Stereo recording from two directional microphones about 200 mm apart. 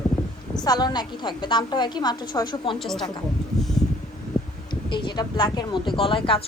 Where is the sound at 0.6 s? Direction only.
20° left (ahead or behind).